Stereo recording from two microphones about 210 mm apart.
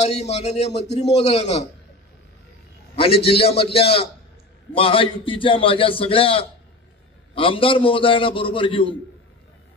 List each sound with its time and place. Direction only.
0.0 s a man's voice: 30° left (ahead or behind)
3.3 s a man's voice: 25° left (ahead or behind)